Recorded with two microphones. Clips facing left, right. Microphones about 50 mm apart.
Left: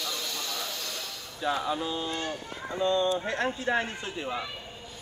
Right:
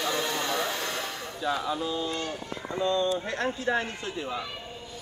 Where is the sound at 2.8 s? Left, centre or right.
Centre.